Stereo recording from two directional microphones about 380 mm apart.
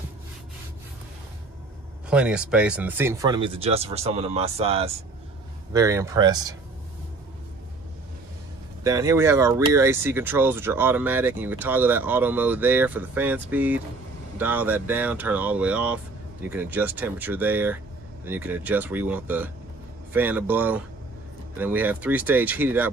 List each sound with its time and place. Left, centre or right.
2.0 s speech: centre
8.8 s speech: centre